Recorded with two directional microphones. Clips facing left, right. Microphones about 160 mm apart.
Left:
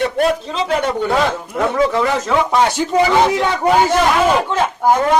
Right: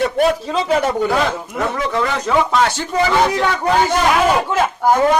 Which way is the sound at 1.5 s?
5° right (ahead or behind).